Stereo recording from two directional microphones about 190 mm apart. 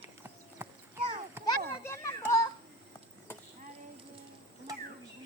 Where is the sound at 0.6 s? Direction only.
10° right (ahead or behind).